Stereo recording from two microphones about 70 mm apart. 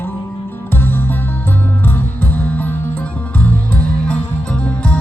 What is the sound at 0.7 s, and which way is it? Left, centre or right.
Music, left.